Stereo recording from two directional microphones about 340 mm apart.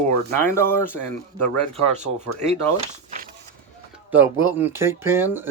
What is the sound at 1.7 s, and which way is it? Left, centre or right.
Speech, centre.